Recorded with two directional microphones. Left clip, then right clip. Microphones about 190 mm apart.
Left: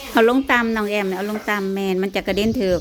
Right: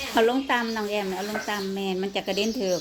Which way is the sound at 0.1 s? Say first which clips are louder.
Left 7 dB; 45° left (ahead or behind).